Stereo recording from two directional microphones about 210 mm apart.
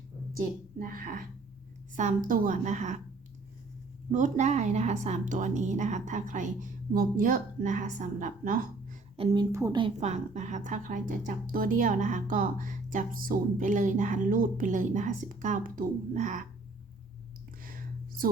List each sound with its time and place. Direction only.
0.3 s a woman's voice: 40° right (ahead or behind)
4.1 s a woman's voice: 35° right (ahead or behind)
9.1 s a woman's voice: 25° right (ahead or behind)
17.6 s a sound: 40° right (ahead or behind)